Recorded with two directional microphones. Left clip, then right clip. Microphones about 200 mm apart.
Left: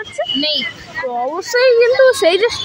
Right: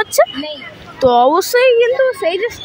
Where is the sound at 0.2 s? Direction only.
45° right (ahead or behind).